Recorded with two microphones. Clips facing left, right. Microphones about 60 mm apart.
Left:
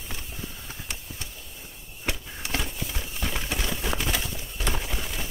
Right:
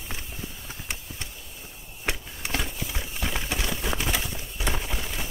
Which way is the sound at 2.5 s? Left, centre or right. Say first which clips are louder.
Right 1 dB; centre.